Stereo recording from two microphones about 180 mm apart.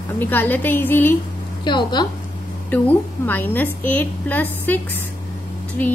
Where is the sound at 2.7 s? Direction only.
10° left (ahead or behind).